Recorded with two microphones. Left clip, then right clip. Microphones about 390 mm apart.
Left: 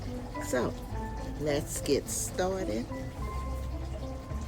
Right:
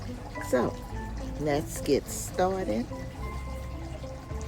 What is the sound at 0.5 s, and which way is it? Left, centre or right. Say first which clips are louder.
Speech: right 4 dB; centre.